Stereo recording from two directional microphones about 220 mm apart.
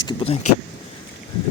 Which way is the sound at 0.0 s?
20° left (ahead or behind).